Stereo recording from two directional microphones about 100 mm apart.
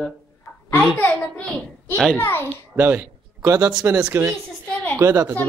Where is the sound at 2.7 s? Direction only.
20° right (ahead or behind).